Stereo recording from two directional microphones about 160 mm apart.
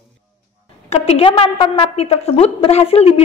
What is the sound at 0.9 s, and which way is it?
A woman's voice, 40° left (ahead or behind).